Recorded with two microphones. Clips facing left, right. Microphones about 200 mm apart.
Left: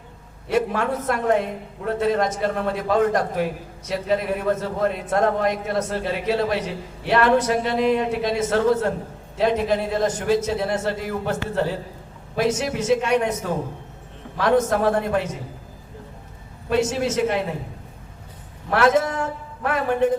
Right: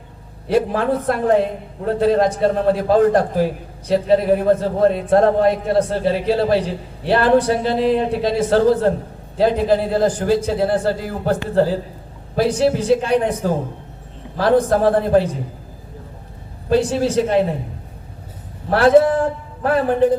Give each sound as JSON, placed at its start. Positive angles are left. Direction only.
{"t": 0.4, "sound": "a man's voice", "side_deg": -30}
{"t": 16.6, "sound": "a man's voice", "side_deg": -35}
{"t": 18.7, "sound": "a man's voice", "side_deg": -30}